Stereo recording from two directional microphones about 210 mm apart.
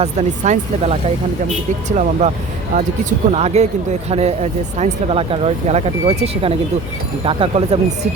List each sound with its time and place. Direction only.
0.0 s speech: 35° right (ahead or behind)
2.7 s speech: 30° right (ahead or behind)